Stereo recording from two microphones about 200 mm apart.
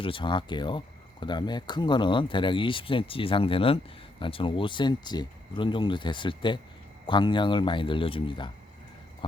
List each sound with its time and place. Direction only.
0.0 s speech: 25° left (ahead or behind)